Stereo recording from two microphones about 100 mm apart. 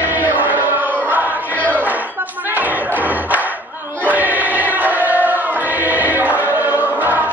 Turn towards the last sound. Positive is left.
turn(degrees=-15)  # may be behind; listen again after turning